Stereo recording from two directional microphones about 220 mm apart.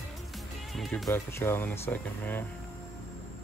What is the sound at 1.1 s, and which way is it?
Speech, 10° left (ahead or behind).